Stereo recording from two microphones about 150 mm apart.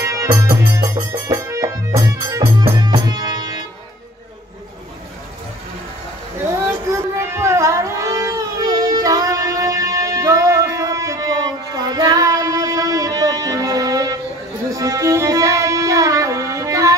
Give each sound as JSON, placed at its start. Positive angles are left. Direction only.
{"t": 0.0, "sound": "music", "side_deg": -20}
{"t": 6.5, "sound": "music", "side_deg": -20}